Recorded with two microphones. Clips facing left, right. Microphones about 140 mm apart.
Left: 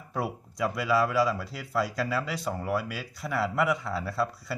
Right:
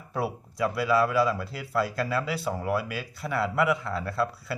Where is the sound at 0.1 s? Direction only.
Centre (ahead or behind).